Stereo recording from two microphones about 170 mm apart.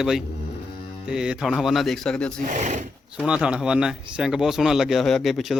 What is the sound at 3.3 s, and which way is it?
A man's voice, 5° right (ahead or behind).